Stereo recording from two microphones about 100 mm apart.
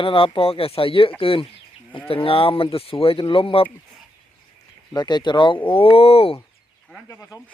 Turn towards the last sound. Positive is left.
turn(degrees=35)  # may be behind; listen again after turning